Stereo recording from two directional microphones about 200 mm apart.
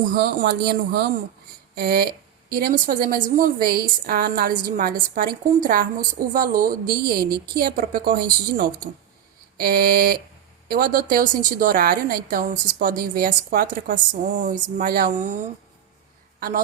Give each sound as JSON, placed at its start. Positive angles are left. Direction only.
{"t": 0.1, "sound": "a woman's voice", "side_deg": -50}